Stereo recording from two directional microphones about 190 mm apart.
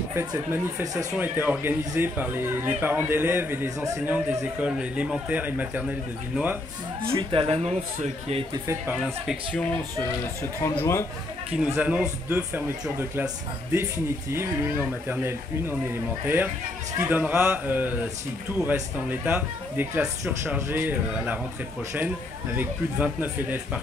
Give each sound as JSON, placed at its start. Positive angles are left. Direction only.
{"t": 0.1, "sound": "speech", "side_deg": -10}
{"t": 7.0, "sound": "speech", "side_deg": -30}
{"t": 8.6, "sound": "speech", "side_deg": -10}
{"t": 10.4, "sound": "speech", "side_deg": 10}
{"t": 11.5, "sound": "speech", "side_deg": -5}
{"t": 15.9, "sound": "speech", "side_deg": -10}
{"t": 22.6, "sound": "speech", "side_deg": -10}